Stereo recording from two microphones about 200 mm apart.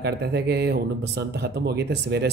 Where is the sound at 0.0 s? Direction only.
55° right (ahead or behind).